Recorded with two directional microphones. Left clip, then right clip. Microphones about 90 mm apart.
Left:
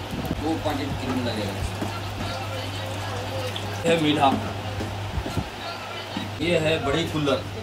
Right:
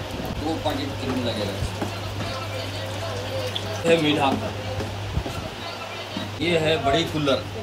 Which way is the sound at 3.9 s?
25° left (ahead or behind).